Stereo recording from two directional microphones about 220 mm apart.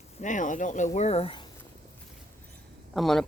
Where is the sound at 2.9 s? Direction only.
Centre (ahead or behind).